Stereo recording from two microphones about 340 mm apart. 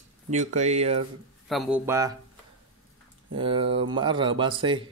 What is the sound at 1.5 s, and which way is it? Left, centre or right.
Speech, centre.